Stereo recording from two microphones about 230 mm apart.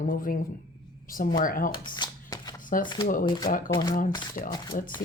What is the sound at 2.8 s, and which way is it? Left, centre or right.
Speech, centre.